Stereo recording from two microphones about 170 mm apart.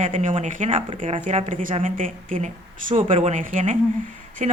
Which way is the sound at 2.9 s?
40° right (ahead or behind).